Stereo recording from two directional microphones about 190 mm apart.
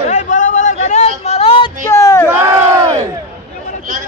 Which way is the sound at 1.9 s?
15° left (ahead or behind).